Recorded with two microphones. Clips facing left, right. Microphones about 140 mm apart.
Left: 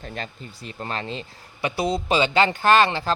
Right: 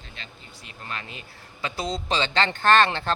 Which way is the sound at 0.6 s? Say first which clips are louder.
Left 7 dB; 35° left (ahead or behind).